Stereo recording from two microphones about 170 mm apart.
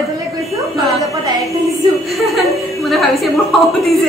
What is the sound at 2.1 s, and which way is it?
A woman's voice, centre (ahead or behind).